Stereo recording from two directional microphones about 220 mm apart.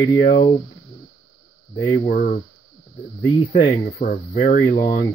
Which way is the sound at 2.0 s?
35° left (ahead or behind).